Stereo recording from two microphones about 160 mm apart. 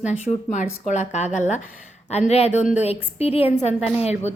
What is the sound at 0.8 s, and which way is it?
A woman's voice, 45° left (ahead or behind).